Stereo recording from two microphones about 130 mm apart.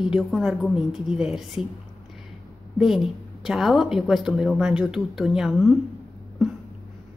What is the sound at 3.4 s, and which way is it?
A woman's voice, centre (ahead or behind).